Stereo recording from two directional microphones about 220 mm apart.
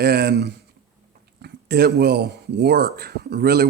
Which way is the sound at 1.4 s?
45° right (ahead or behind).